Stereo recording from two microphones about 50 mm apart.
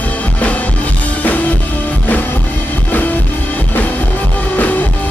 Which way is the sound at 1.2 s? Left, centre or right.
Left.